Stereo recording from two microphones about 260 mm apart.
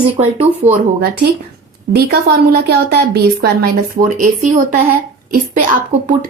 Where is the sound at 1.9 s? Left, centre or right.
Right.